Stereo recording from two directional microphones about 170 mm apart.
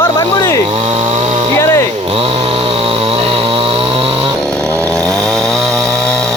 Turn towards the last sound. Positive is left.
turn(degrees=5)  # may be behind; listen again after turning